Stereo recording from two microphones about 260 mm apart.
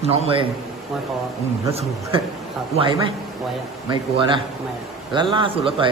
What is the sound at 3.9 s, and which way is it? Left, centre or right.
A man's voice, centre.